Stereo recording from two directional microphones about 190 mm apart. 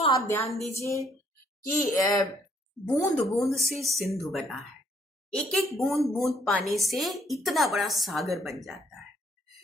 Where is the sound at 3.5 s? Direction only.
Centre (ahead or behind).